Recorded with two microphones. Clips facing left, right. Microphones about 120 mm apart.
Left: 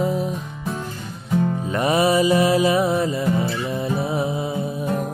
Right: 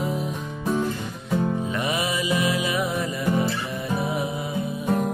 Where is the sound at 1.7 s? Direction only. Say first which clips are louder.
Left 7 dB; 40° left (ahead or behind).